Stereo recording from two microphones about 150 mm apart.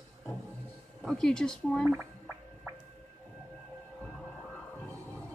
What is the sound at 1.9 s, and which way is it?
Gargling, 20° right (ahead or behind).